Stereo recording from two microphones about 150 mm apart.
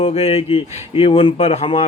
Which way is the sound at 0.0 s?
40° left (ahead or behind).